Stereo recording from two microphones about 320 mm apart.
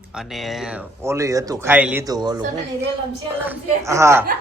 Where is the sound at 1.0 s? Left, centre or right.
Centre.